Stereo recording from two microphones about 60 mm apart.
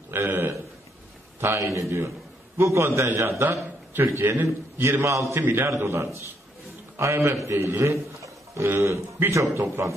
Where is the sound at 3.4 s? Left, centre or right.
Right.